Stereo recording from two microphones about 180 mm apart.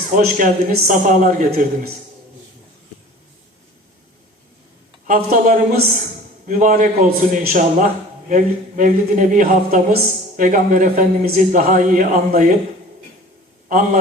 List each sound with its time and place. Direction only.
0.2 s speech: 50° right (ahead or behind)
5.0 s speech: 50° right (ahead or behind)
13.7 s a man's voice: 50° right (ahead or behind)